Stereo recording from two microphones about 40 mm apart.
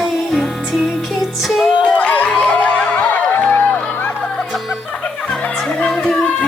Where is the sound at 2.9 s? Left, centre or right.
Left.